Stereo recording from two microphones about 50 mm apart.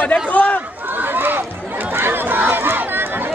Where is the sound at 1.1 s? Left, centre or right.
Right.